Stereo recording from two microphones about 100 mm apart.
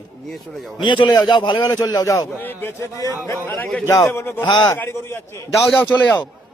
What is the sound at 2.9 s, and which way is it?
Speech, 30° left (ahead or behind).